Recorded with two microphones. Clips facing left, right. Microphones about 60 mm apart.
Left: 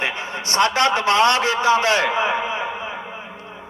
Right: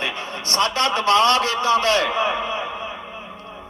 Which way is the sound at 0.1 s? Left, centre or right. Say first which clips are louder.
Left 2 dB; centre.